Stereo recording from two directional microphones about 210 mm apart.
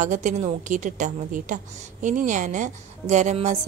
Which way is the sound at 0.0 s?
35° right (ahead or behind).